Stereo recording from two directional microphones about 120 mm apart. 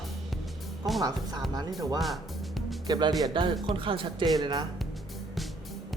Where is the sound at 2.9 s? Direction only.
35° right (ahead or behind).